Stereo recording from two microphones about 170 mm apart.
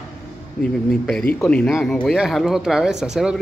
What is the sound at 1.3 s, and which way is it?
Speech, 5° left (ahead or behind).